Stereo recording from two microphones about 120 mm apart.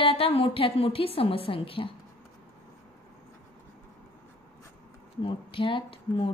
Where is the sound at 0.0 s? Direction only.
55° left (ahead or behind).